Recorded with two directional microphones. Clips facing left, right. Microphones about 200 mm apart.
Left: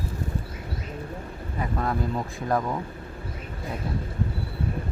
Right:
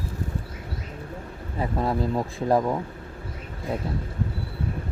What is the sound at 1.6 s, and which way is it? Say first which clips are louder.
Speech: right 3 dB; 25° right (ahead or behind).